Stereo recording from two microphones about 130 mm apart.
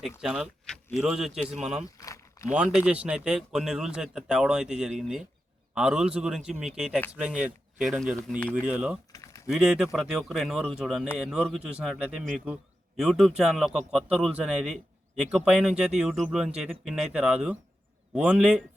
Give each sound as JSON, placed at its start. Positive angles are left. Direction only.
{"t": 0.2, "sound": "speech", "side_deg": -5}
{"t": 2.0, "sound": "a sound", "side_deg": 25}
{"t": 2.5, "sound": "speech", "side_deg": -10}
{"t": 8.6, "sound": "speech", "side_deg": -10}
{"t": 9.1, "sound": "typing", "side_deg": 25}
{"t": 9.5, "sound": "speech", "side_deg": -5}